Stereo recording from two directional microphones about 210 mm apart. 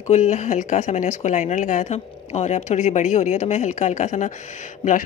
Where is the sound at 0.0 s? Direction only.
30° left (ahead or behind).